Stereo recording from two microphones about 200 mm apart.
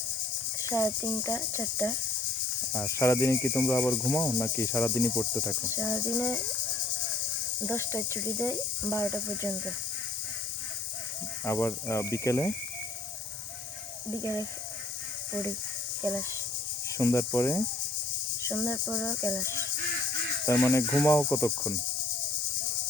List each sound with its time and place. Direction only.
0.6 s speech: 15° left (ahead or behind)
7.7 s speech: 15° left (ahead or behind)
11.4 s speech: 15° left (ahead or behind)
14.2 s speech: 15° left (ahead or behind)
17.0 s speech: 15° left (ahead or behind)